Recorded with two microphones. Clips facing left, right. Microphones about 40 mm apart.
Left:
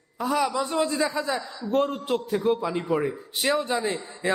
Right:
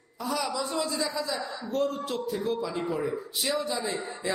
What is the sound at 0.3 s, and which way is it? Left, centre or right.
A man's voice, left.